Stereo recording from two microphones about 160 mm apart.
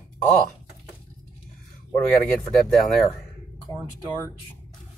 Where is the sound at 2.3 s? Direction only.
Centre (ahead or behind).